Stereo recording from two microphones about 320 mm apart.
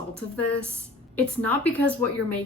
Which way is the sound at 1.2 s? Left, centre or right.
Centre.